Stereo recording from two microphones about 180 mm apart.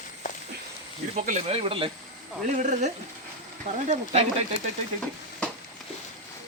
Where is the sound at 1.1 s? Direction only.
40° right (ahead or behind).